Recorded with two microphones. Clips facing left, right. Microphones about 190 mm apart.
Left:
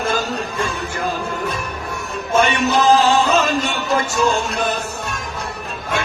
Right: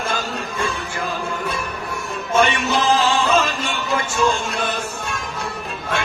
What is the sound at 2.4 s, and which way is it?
Music, 40° left (ahead or behind).